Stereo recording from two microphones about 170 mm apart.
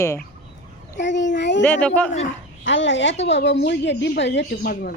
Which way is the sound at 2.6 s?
90° left.